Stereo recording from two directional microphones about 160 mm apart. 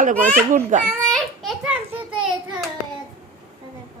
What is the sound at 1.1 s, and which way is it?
Speech, centre (ahead or behind).